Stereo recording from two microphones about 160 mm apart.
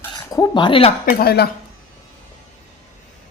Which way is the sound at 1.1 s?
75° left (ahead or behind).